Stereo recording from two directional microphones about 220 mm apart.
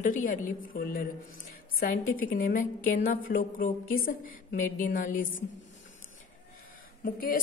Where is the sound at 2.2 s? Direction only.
40° left (ahead or behind).